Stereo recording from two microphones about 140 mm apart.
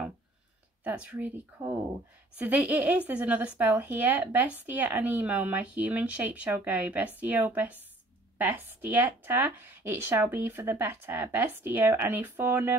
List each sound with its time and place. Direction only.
0.8 s a woman's voice: 10° right (ahead or behind)